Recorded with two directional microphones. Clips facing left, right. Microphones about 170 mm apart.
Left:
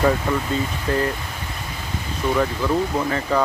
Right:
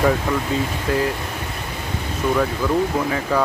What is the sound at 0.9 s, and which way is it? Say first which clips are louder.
Speech: right 1 dB; 5° right (ahead or behind).